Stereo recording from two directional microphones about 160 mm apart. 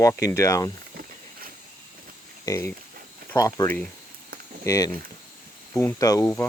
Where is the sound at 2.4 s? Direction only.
20° left (ahead or behind).